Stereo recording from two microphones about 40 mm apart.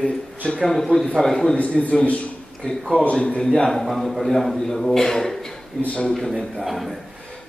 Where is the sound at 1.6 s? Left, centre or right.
Left.